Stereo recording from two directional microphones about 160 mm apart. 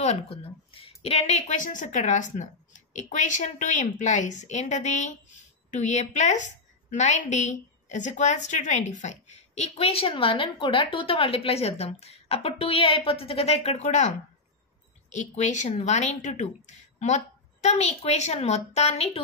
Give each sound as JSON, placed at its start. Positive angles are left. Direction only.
{"t": 0.0, "sound": "a woman's voice", "side_deg": 40}